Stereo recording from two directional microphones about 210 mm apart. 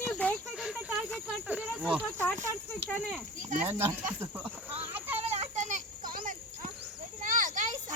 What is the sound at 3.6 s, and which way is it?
Speech, 10° right (ahead or behind).